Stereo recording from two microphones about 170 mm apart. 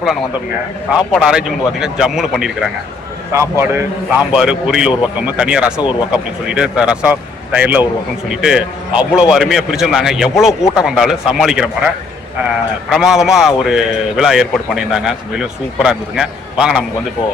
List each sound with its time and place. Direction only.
0.9 s speech: 5° right (ahead or behind)
3.3 s a man's voice: 15° right (ahead or behind)
4.4 s speech: 5° right (ahead or behind)
12.9 s speech: centre (ahead or behind)